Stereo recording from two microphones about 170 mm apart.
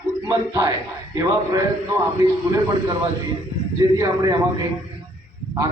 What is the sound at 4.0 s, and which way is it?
Speech, 20° right (ahead or behind).